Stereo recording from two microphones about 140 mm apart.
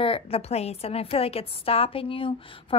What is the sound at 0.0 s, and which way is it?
A woman's voice, 40° left (ahead or behind).